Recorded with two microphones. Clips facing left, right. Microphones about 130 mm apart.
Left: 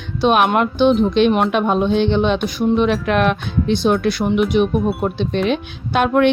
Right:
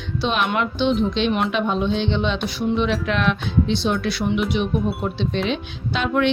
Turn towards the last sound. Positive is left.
turn(degrees=55)  # may be behind; listen again after turning